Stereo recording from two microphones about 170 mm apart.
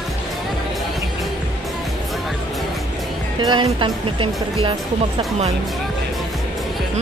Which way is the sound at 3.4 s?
25° right (ahead or behind).